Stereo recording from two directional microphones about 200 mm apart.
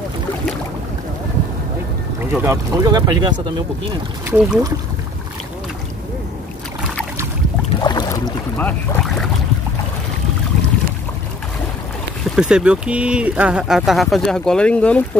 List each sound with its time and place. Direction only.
2.4 s speech: 15° right (ahead or behind)
7.8 s boat: 20° left (ahead or behind)
8.5 s speech: 5° left (ahead or behind)
12.4 s speech: 5° right (ahead or behind)